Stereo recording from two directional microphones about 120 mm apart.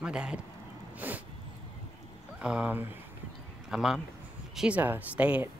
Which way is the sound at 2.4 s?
10° right (ahead or behind).